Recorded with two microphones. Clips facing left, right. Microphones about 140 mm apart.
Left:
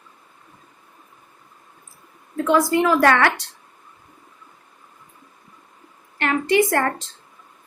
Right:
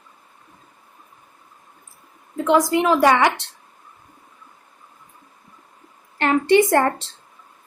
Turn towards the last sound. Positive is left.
turn(degrees=-25)  # may be behind; listen again after turning